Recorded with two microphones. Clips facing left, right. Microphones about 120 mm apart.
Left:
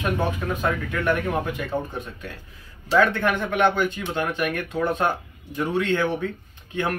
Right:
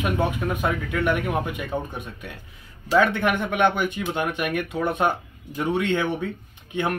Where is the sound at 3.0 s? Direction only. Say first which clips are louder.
Even; 20° right (ahead or behind).